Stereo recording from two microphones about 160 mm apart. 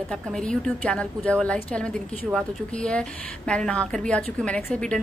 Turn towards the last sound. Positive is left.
turn(degrees=5)  # may be behind; listen again after turning